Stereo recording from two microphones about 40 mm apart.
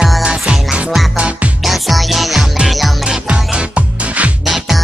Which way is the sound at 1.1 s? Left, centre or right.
Right.